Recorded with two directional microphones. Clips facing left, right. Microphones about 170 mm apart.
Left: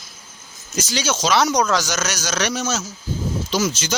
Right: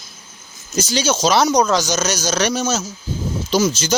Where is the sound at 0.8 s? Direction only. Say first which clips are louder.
Right 4 dB; 35° right (ahead or behind).